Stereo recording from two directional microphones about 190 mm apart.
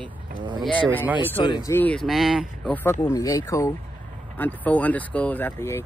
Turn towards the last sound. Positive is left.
turn(degrees=15)  # may be behind; listen again after turning